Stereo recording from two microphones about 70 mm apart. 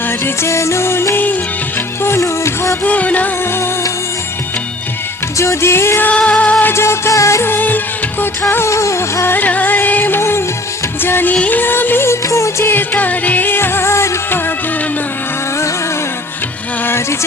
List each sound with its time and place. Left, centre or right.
0.4 s music: left
2.8 s music: left
5.4 s music: left
6.1 s music: centre
6.7 s music of bollywood: left
8.2 s music: left
8.7 s music: left
11.0 s music of bollywood: left
12.7 s music: left
16.8 s music: left